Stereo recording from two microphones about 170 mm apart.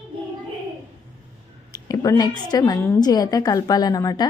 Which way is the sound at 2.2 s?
25° left (ahead or behind).